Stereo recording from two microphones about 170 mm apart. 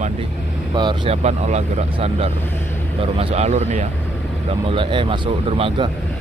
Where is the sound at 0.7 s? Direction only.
30° right (ahead or behind).